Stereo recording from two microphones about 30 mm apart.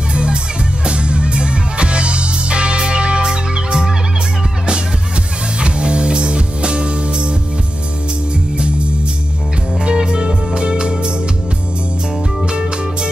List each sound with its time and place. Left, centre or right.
0.1 s music: right
3.3 s music: right
5.6 s music: right
9.8 s music: right
12.4 s music: right